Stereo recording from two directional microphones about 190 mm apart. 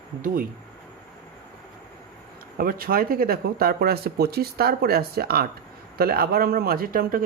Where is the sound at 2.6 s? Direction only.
50° right (ahead or behind).